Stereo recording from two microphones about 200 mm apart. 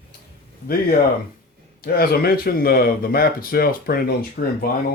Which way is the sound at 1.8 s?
50° left (ahead or behind).